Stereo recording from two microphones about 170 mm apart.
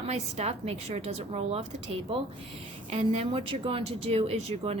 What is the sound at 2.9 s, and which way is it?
A woman's voice, 40° right (ahead or behind).